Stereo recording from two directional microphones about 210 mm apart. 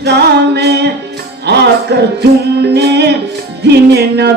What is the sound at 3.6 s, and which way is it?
Music, 50° right (ahead or behind).